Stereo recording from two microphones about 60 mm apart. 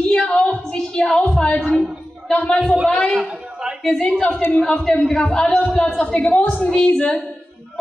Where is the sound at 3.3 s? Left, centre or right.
Centre.